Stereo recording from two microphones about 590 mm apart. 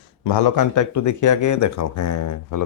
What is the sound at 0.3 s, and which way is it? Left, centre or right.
Speech, left.